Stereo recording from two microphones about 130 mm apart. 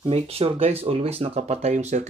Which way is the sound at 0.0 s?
50° right (ahead or behind).